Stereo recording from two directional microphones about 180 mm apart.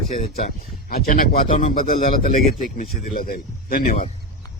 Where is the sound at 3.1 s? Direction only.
55° left (ahead or behind).